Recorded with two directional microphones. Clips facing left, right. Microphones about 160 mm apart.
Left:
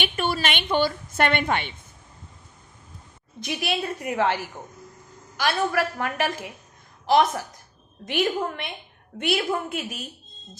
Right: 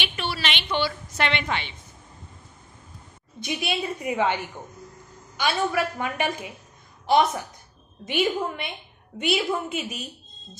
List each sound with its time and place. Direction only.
0.0 s a woman's voice: 45° left (ahead or behind)
3.4 s a woman's voice: centre (ahead or behind)